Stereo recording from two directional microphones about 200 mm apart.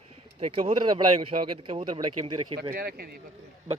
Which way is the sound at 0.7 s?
25° right (ahead or behind).